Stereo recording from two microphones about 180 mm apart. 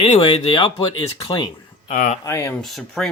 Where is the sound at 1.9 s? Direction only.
40° left (ahead or behind).